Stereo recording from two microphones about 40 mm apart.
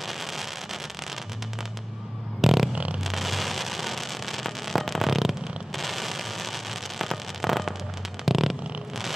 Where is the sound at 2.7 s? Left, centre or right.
Right.